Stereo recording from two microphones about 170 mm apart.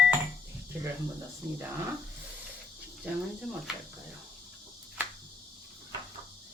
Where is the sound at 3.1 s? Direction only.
10° right (ahead or behind).